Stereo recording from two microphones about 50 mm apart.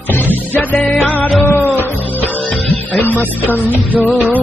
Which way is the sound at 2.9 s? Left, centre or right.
Left.